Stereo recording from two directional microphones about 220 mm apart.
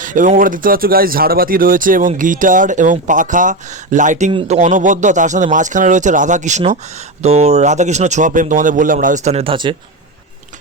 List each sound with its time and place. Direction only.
0.0 s speech: 35° right (ahead or behind)